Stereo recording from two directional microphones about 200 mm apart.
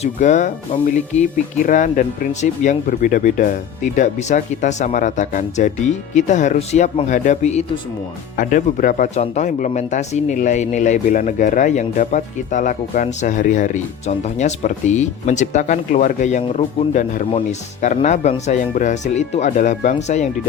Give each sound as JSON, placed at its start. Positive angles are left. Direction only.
{"t": 0.0, "sound": "speech", "side_deg": 40}